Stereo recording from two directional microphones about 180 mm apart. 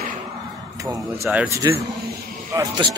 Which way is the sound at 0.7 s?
20° right (ahead or behind).